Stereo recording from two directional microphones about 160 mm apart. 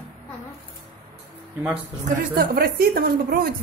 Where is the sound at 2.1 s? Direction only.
65° right (ahead or behind).